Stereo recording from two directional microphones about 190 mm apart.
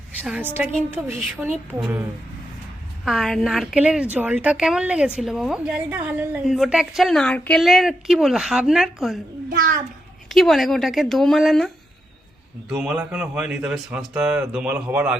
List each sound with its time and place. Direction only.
0.2 s a woman's voice: 10° right (ahead or behind)
9.5 s a child's voice: 45° right (ahead or behind)
10.2 s a woman's voice: centre (ahead or behind)
12.7 s a woman's voice: 5° right (ahead or behind)